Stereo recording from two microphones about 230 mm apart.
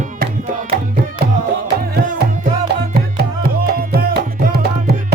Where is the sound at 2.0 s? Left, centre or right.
Right.